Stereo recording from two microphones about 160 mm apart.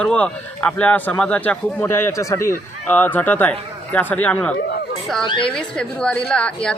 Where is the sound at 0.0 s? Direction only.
5° left (ahead or behind).